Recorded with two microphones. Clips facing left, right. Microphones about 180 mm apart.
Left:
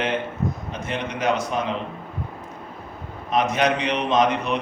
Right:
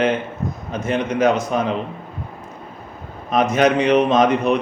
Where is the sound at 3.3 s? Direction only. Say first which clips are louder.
Right 5 dB; 45° right (ahead or behind).